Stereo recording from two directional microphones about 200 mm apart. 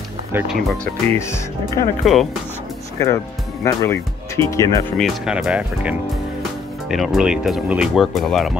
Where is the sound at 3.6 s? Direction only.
15° left (ahead or behind).